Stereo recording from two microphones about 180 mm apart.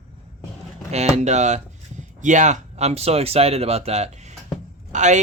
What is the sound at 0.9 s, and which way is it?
Speech, 35° right (ahead or behind).